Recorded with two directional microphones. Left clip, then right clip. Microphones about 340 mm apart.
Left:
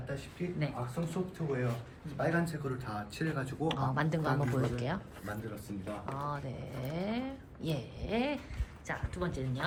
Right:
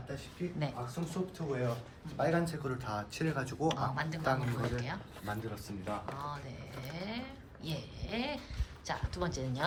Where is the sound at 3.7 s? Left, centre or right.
Centre.